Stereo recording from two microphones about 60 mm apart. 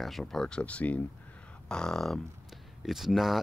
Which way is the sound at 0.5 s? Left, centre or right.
Left.